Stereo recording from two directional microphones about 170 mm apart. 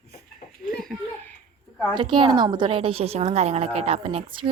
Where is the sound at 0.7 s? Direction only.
Centre (ahead or behind).